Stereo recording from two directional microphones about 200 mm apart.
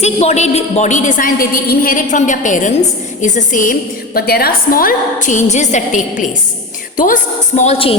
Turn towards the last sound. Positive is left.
turn(degrees=30)  # may be behind; listen again after turning